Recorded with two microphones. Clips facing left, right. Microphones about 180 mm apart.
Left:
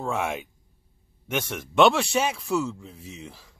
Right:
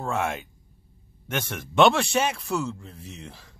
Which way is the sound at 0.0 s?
5° left (ahead or behind).